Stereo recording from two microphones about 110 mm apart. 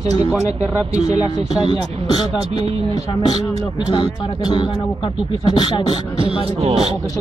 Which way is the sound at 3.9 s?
45° left (ahead or behind).